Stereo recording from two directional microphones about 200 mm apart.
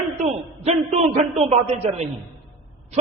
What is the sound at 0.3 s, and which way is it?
A man's voice, 30° right (ahead or behind).